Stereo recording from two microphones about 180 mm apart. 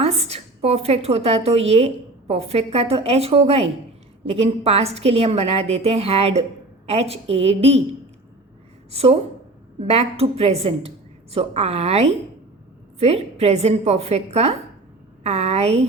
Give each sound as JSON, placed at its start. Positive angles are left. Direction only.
{"t": 0.0, "sound": "a woman's voice", "side_deg": -35}
{"t": 8.9, "sound": "a woman's voice", "side_deg": -35}